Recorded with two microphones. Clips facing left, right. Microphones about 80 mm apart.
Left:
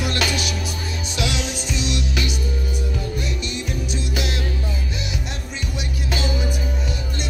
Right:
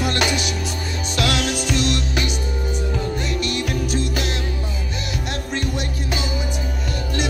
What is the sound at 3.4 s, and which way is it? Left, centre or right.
Music, right.